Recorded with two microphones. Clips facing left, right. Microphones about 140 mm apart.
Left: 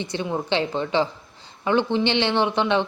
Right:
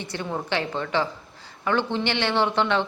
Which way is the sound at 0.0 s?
20° left (ahead or behind).